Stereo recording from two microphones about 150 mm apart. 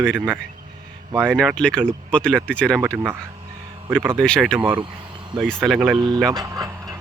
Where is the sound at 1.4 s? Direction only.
5° left (ahead or behind).